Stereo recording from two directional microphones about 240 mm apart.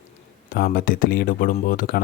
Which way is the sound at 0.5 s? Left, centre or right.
Left.